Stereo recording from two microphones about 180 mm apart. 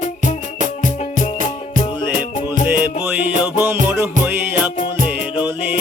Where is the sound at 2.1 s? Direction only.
50° right (ahead or behind).